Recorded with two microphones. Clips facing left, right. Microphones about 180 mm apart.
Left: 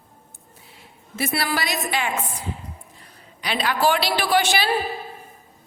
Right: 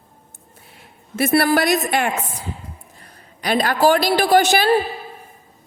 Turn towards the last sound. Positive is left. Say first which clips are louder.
# right 6 dB
turn(degrees=-45)  # may be behind; listen again after turning